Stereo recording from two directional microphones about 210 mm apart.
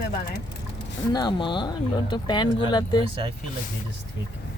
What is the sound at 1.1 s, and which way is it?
Speech, 20° left (ahead or behind).